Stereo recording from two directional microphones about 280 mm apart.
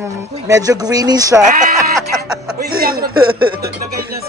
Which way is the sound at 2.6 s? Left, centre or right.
Right.